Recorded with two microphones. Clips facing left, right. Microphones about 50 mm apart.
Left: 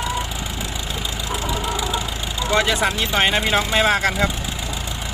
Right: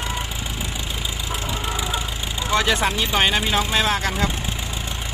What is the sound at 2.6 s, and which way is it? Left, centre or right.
Speech, centre.